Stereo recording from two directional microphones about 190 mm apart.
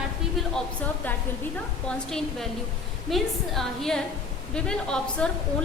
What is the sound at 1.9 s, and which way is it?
A woman's voice, 5° left (ahead or behind).